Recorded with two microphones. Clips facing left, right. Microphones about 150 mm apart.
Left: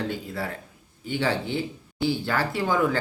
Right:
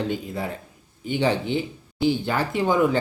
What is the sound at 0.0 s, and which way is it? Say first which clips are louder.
Speech: right 3 dB; 20° right (ahead or behind).